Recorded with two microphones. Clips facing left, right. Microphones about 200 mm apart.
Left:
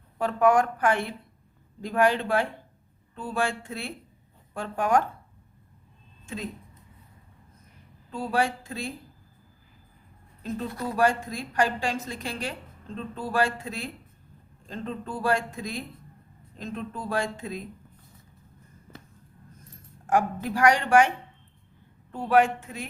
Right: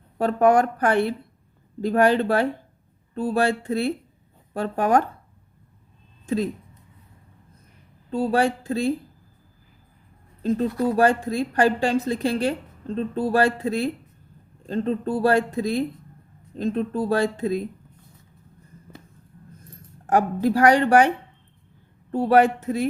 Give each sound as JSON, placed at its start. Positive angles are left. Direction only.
{"t": 0.2, "sound": "speech", "side_deg": -35}
{"t": 6.2, "sound": "speech", "side_deg": -35}
{"t": 8.1, "sound": "speech", "side_deg": -35}
{"t": 10.4, "sound": "speech", "side_deg": -35}
{"t": 20.1, "sound": "speech", "side_deg": -35}
{"t": 22.1, "sound": "speech", "side_deg": -35}